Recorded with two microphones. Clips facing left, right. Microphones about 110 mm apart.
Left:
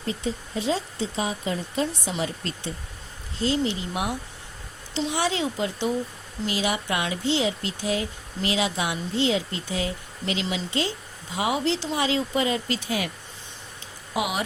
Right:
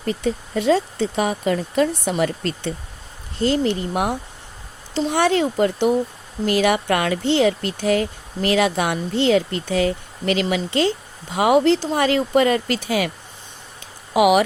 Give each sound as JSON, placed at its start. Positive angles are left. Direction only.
{"t": 0.0, "sound": "speech", "side_deg": -65}
{"t": 3.4, "sound": "speech", "side_deg": -55}
{"t": 14.1, "sound": "speech", "side_deg": -70}